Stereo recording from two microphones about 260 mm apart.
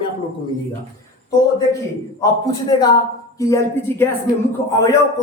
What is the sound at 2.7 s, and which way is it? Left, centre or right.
Speech, centre.